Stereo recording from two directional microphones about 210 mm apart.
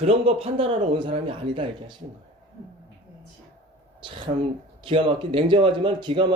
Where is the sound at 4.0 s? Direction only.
25° right (ahead or behind).